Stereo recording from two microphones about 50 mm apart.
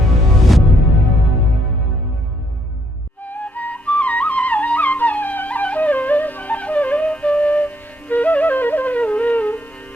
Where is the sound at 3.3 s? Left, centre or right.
Left.